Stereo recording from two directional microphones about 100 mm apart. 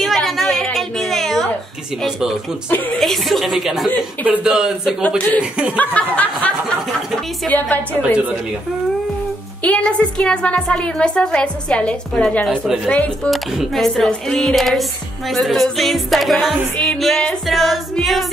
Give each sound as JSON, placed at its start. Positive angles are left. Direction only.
{"t": 0.0, "sound": "a sound", "side_deg": 0}
{"t": 2.0, "sound": "music", "side_deg": -5}
{"t": 4.3, "sound": "speech", "side_deg": -5}
{"t": 5.0, "sound": "a woman's voice", "side_deg": 15}
{"t": 5.4, "sound": "speech", "side_deg": -10}
{"t": 7.4, "sound": "a woman's voice", "side_deg": 15}
{"t": 9.6, "sound": "a woman's voice", "side_deg": 10}
{"t": 12.4, "sound": "music", "side_deg": -5}
{"t": 12.8, "sound": "a woman's voice", "side_deg": 15}
{"t": 13.3, "sound": "music", "side_deg": 0}
{"t": 16.7, "sound": "a woman's voice", "side_deg": 5}
{"t": 17.5, "sound": "music", "side_deg": 0}